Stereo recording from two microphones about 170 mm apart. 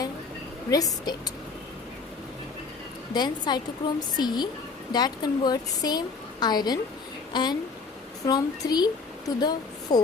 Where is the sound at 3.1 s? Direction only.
25° left (ahead or behind).